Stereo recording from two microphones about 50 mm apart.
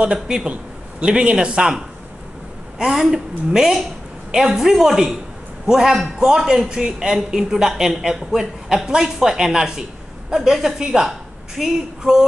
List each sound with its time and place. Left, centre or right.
0.0 s a man's voice: centre
2.8 s a woman's voice: centre